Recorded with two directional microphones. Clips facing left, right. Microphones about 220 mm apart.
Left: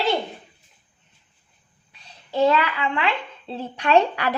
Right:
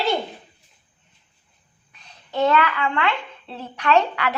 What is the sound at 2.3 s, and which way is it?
A woman's voice, 30° left (ahead or behind).